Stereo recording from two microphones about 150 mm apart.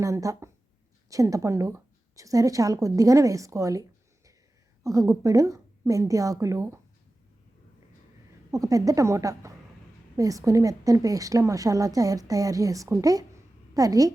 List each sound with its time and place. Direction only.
0.0 s a woman's voice: 20° right (ahead or behind)
8.4 s a woman's voice: 25° right (ahead or behind)